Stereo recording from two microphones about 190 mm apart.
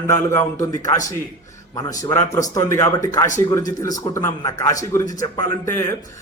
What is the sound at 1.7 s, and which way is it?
A man's voice, 15° left (ahead or behind).